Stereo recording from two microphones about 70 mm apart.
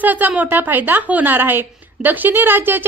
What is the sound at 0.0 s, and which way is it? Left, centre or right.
A woman's voice, right.